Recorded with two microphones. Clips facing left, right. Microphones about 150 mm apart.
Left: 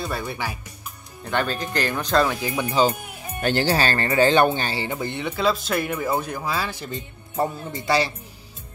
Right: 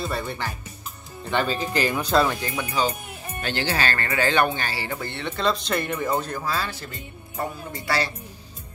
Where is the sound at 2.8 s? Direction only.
30° left (ahead or behind).